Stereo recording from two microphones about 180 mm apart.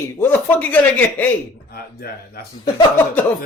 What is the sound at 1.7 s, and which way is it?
Speech, 55° left (ahead or behind).